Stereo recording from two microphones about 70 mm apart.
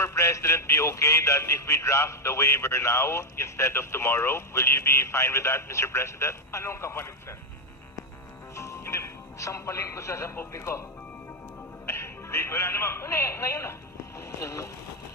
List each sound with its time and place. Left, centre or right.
0.0 s speech: left
8.5 s speech: left
11.9 s speech: left